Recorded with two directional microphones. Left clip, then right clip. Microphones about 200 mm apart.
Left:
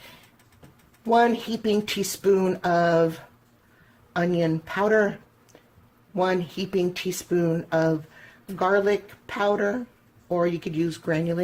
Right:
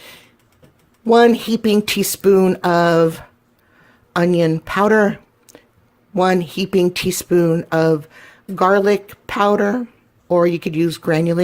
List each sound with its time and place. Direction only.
1.1 s speech: 50° right (ahead or behind)